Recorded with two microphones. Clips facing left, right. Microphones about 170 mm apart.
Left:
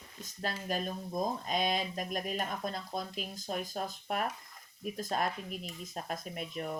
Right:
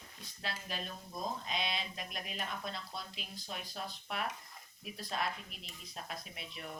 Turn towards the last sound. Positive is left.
turn(degrees=45)  # may be behind; listen again after turning